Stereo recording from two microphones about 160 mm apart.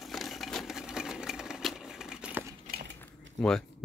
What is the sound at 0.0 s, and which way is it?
Sewing machine, centre (ahead or behind).